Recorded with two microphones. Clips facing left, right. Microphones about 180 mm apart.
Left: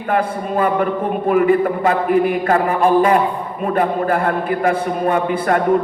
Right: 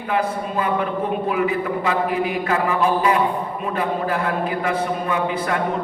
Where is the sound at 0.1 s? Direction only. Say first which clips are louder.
Left 4 dB; 50° left (ahead or behind).